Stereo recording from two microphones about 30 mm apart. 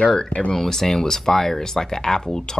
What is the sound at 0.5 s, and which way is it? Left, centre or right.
Speech, centre.